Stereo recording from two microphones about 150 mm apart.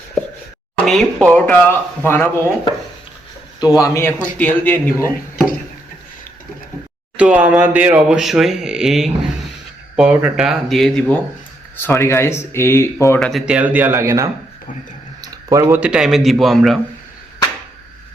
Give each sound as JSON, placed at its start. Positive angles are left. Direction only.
{"t": 0.9, "sound": "speech", "side_deg": 5}
{"t": 3.6, "sound": "a man's voice", "side_deg": 25}
{"t": 7.2, "sound": "speech", "side_deg": -10}
{"t": 11.8, "sound": "speech", "side_deg": 15}
{"t": 13.1, "sound": "speech", "side_deg": 0}
{"t": 15.2, "sound": "a sound", "side_deg": -20}
{"t": 15.8, "sound": "speech", "side_deg": -5}